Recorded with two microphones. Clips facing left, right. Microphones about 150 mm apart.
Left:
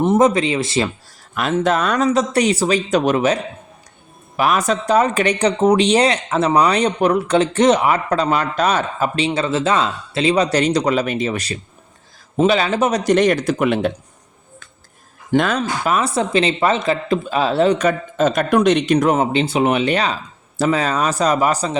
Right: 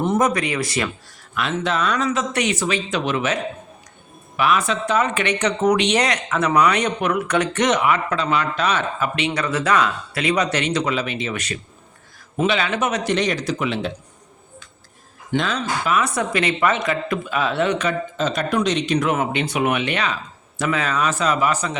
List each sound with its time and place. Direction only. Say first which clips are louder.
0.0 s speech: left 5 dB; 25° left (ahead or behind)
1.4 s speech: left 5 dB; 45° left (ahead or behind)
4.4 s speech: left 2 dB; 40° left (ahead or behind)
13.1 s speech: left 6 dB; 50° left (ahead or behind)
15.4 s speech: left 5 dB; 50° left (ahead or behind)
19.0 s speech: left 5 dB; 30° left (ahead or behind)